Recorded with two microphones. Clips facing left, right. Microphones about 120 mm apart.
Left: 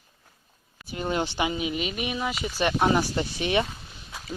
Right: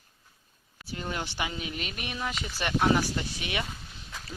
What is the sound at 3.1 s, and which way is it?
Speech, 30° left (ahead or behind).